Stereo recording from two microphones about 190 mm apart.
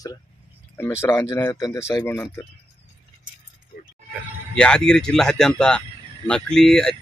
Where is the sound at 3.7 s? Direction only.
55° left (ahead or behind).